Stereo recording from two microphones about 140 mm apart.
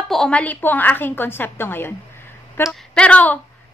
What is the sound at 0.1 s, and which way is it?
A woman's voice, 5° left (ahead or behind).